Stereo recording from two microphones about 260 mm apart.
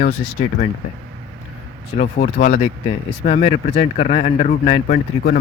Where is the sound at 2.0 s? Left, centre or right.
Left.